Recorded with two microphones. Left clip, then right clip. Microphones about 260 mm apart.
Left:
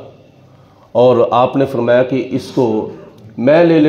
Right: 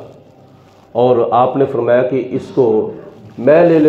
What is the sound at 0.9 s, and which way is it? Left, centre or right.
A man's voice, left.